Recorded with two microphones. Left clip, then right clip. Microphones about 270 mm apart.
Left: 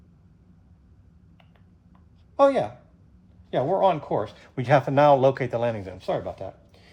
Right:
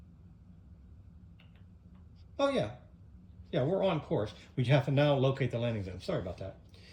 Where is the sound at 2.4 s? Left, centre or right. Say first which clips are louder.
Left 11 dB; centre.